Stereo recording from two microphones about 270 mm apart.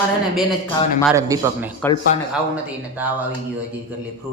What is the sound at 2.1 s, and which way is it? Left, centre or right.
Speech, left.